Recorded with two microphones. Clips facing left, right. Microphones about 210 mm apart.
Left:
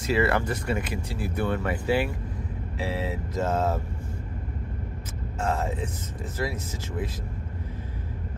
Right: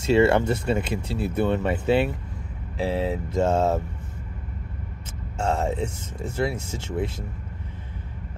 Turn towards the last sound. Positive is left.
turn(degrees=-25)  # may be behind; listen again after turning